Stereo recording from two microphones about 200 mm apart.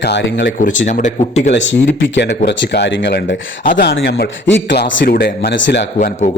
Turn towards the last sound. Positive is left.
turn(degrees=35)  # may be behind; listen again after turning